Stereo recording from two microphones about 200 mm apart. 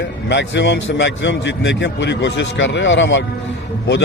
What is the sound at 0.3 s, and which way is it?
A man's voice, 65° left (ahead or behind).